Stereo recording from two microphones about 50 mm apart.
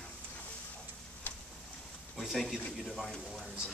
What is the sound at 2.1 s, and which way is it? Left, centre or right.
Speech, centre.